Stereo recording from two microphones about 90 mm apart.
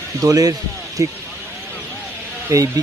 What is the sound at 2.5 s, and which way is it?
Speech, 40° right (ahead or behind).